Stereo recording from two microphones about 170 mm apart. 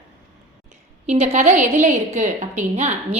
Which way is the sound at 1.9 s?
45° right (ahead or behind).